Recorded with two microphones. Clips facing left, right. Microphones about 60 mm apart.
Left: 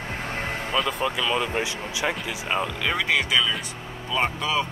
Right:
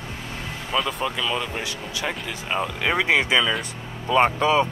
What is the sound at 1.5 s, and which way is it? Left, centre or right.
Speech, left.